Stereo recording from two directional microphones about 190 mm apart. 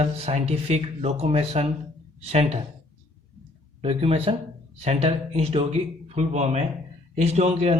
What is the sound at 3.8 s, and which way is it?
A man's voice, 30° right (ahead or behind).